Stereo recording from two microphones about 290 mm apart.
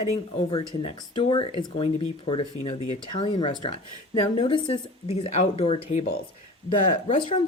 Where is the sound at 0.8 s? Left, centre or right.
Centre.